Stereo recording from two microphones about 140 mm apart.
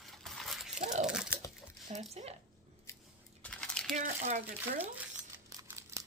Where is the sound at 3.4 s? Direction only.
5° left (ahead or behind).